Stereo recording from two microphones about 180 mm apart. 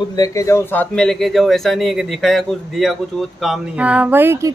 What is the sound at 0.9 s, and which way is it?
Speech, 5° left (ahead or behind).